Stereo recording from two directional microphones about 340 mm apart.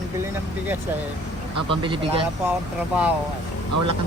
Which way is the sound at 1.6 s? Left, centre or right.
Centre.